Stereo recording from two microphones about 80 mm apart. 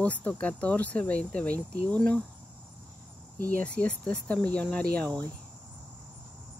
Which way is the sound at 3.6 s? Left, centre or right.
Centre.